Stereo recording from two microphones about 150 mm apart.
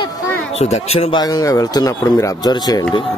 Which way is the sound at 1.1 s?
25° left (ahead or behind).